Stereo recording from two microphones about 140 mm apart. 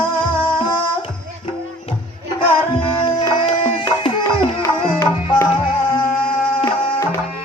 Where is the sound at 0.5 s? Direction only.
35° left (ahead or behind).